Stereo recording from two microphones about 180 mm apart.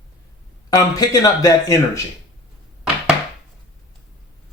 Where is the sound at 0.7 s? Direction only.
20° left (ahead or behind).